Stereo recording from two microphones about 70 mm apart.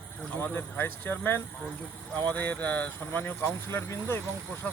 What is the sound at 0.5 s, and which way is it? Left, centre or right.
Speech, left.